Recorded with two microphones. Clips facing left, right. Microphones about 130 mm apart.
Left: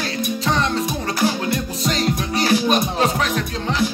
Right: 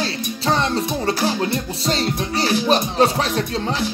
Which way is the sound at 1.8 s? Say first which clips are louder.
Left 1 dB; 30° right (ahead or behind).